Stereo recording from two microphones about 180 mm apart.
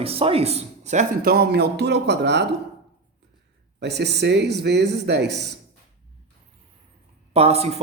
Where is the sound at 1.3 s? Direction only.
60° right (ahead or behind).